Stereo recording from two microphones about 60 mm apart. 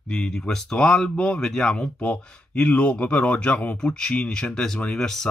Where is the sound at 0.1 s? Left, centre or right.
Centre.